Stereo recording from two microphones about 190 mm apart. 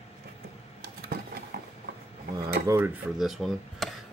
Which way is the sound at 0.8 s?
50° right (ahead or behind).